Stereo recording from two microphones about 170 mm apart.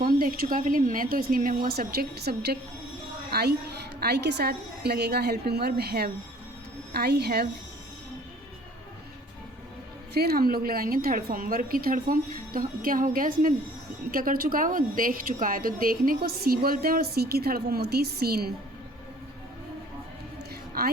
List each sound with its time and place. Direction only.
0.0 s a woman's voice: 60° right (ahead or behind)
4.0 s a woman's voice: 75° right (ahead or behind)
10.2 s a woman's voice: 65° right (ahead or behind)